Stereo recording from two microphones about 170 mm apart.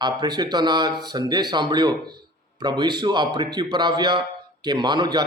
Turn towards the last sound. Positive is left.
turn(degrees=-25)  # may be behind; listen again after turning